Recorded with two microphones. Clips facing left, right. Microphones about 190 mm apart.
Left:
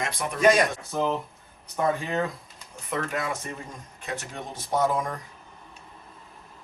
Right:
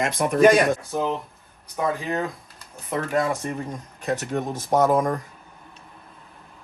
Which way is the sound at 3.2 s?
50° right (ahead or behind).